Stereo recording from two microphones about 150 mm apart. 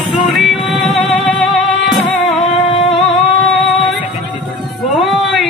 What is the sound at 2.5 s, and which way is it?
Music, 35° left (ahead or behind).